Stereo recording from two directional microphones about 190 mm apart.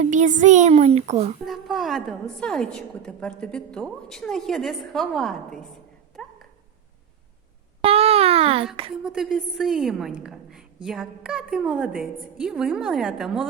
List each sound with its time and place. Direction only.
0.0 s a woman's voice: 40° right (ahead or behind)
1.5 s a woman's voice: centre (ahead or behind)
6.2 s dog: centre (ahead or behind)
7.8 s a sound: 30° right (ahead or behind)
9.0 s a woman's voice: centre (ahead or behind)